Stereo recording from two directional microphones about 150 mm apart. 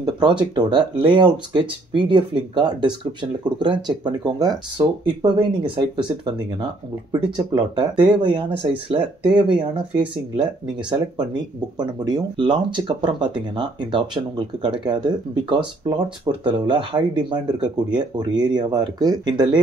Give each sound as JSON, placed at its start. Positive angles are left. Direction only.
{"t": 0.0, "sound": "speech", "side_deg": -30}